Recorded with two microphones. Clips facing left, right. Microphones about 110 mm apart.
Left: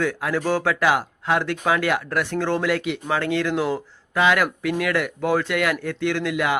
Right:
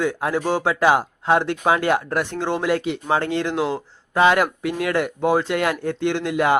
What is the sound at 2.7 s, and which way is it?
Speech, 30° right (ahead or behind).